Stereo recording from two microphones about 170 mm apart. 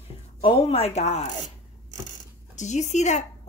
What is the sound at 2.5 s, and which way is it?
Speech, 45° left (ahead or behind).